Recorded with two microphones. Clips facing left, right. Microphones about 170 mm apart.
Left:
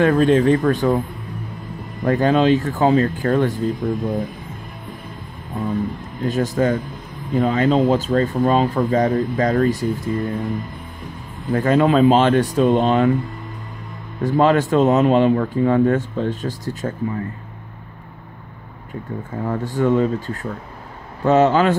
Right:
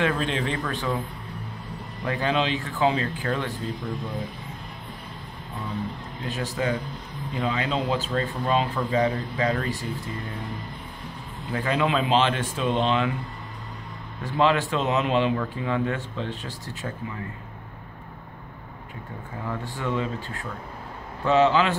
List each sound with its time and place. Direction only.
0.0 s speech: 45° left (ahead or behind)
2.0 s speech: 45° left (ahead or behind)
6.2 s speech: 45° left (ahead or behind)
11.5 s speech: 45° left (ahead or behind)
14.2 s speech: 45° left (ahead or behind)
19.4 s speech: 45° left (ahead or behind)